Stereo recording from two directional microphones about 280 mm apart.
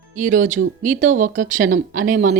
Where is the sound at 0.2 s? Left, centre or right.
Right.